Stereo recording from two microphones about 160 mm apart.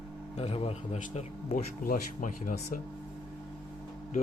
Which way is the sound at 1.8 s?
60° left (ahead or behind).